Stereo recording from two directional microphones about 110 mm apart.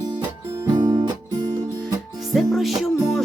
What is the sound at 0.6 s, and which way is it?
Music, 35° right (ahead or behind).